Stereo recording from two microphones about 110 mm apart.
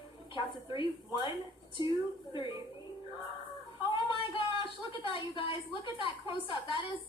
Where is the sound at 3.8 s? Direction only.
50° left (ahead or behind).